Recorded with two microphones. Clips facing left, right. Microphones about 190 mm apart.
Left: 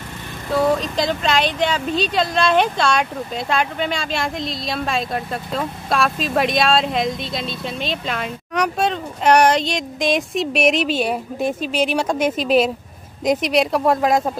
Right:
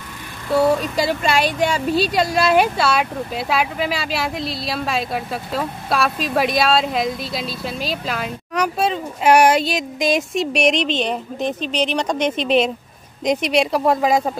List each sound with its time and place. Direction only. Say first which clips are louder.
0.5 s speech: right 2 dB; 10° right (ahead or behind)